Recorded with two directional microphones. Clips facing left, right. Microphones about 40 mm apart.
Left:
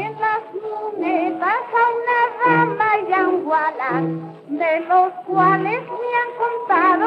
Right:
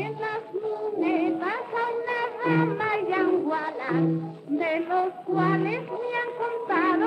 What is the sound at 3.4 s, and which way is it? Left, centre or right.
Music, left.